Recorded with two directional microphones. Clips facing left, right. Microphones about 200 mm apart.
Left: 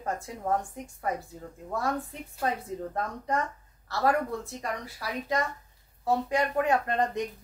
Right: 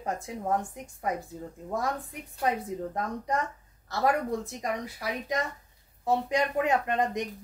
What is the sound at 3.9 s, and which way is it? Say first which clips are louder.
Speech: even; 15° right (ahead or behind).